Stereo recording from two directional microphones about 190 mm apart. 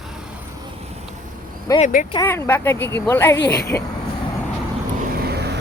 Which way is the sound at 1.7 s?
15° left (ahead or behind).